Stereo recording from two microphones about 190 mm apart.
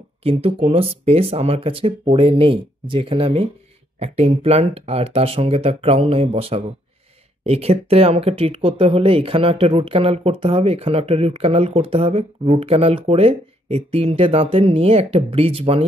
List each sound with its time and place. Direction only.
0.2 s speech: 30° right (ahead or behind)